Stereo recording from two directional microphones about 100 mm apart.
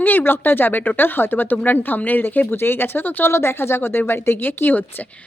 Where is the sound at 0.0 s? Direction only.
20° left (ahead or behind).